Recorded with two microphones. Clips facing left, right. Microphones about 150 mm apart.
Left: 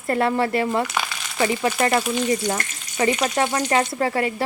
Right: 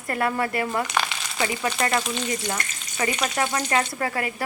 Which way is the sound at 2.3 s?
25° left (ahead or behind).